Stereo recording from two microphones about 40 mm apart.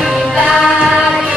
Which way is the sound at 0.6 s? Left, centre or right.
Centre.